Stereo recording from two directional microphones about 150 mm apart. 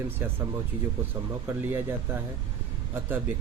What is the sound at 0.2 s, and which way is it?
Speech, 15° right (ahead or behind).